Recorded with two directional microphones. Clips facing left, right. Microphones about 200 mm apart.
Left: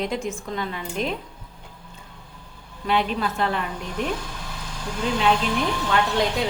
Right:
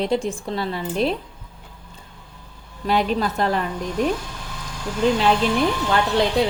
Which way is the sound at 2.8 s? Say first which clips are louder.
Right 3 dB; 40° right (ahead or behind).